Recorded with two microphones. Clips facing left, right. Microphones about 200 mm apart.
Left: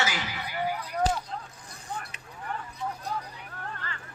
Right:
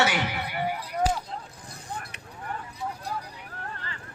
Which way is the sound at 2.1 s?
65° right (ahead or behind).